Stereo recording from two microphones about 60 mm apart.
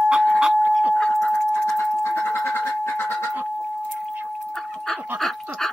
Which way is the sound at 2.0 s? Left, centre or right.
Left.